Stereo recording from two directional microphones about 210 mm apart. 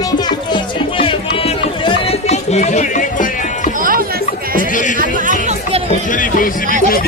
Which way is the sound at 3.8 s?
40° right (ahead or behind).